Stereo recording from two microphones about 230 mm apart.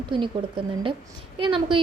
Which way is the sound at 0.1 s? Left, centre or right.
Right.